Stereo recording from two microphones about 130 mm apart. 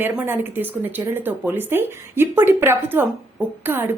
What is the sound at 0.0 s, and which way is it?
A woman's voice, 15° right (ahead or behind).